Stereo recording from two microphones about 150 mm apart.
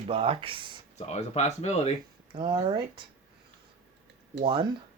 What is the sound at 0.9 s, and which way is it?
Speech, 50° left (ahead or behind).